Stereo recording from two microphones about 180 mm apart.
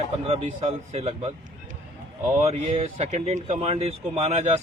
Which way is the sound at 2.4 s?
35° right (ahead or behind).